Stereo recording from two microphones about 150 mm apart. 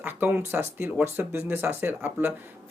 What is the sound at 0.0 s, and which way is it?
Speech, 15° right (ahead or behind).